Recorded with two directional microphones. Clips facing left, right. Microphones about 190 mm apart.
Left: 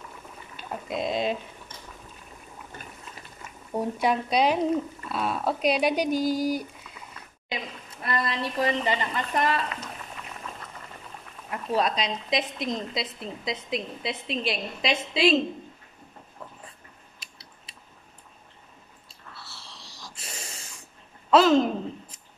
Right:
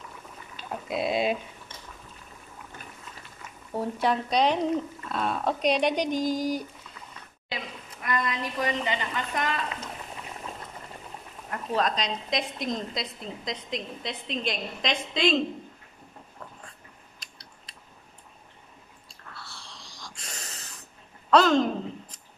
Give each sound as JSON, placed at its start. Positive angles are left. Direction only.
{"t": 0.6, "sound": "speech", "side_deg": 0}
{"t": 3.7, "sound": "speech", "side_deg": 15}
{"t": 8.0, "sound": "a woman's voice", "side_deg": 35}
{"t": 11.5, "sound": "a woman's voice", "side_deg": 10}
{"t": 17.2, "sound": "a sound", "side_deg": 5}
{"t": 19.0, "sound": "a sound", "side_deg": 5}